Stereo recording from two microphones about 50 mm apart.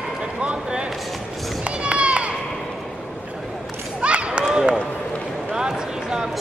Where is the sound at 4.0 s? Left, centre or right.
Right.